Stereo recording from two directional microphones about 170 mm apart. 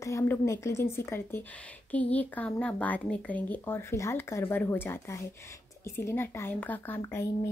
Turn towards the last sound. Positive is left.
turn(degrees=15)  # may be behind; listen again after turning